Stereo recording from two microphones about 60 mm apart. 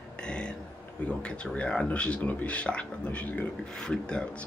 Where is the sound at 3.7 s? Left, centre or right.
Centre.